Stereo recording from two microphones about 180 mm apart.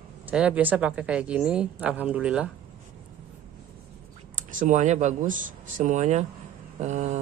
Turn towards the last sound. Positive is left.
turn(degrees=-40)  # may be behind; listen again after turning